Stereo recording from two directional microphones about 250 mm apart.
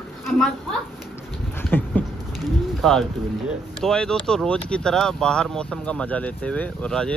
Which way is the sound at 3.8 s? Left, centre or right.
Centre.